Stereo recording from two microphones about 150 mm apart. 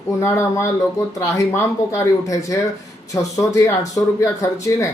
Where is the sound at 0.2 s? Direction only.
15° left (ahead or behind).